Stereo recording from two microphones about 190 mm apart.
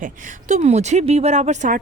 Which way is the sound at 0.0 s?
40° right (ahead or behind).